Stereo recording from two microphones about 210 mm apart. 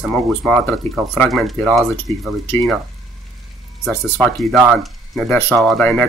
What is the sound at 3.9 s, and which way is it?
Speech, 5° left (ahead or behind).